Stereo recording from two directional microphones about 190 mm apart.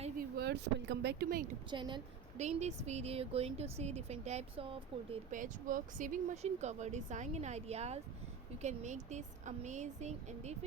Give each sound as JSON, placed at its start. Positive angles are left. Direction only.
{"t": 0.2, "sound": "speech", "side_deg": -60}
{"t": 1.7, "sound": "speech", "side_deg": -25}
{"t": 2.4, "sound": "speech", "side_deg": -35}
{"t": 5.3, "sound": "speech", "side_deg": -45}